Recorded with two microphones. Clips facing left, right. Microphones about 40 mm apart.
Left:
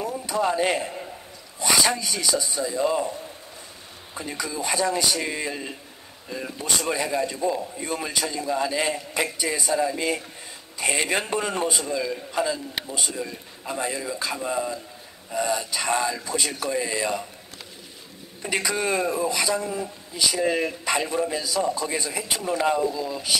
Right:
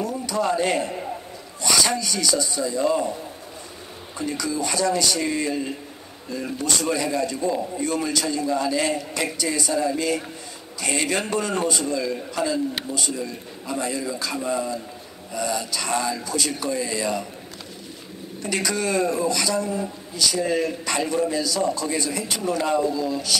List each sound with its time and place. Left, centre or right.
0.0 s a sound: centre
1.6 s a man's voice: centre
4.2 s a man's voice: centre
6.8 s a man's voice: centre
18.4 s a man's voice: centre